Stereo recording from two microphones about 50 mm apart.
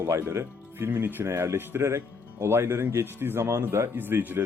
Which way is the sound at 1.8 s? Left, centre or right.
Right.